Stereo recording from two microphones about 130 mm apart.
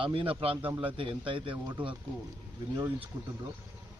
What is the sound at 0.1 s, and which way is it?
Speech, 45° right (ahead or behind).